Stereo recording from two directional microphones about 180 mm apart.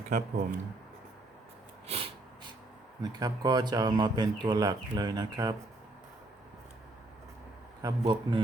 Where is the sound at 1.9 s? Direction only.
30° right (ahead or behind).